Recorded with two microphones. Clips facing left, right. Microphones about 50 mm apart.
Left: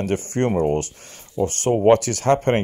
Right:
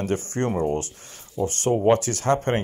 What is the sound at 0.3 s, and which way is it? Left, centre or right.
Speech, left.